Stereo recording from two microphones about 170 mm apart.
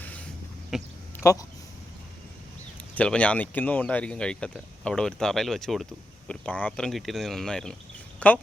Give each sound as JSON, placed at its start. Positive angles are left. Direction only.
{"t": 0.0, "sound": "a sound", "side_deg": 10}
{"t": 0.7, "sound": "speech", "side_deg": -5}
{"t": 1.2, "sound": "speech", "side_deg": 20}
{"t": 2.9, "sound": "speech", "side_deg": 5}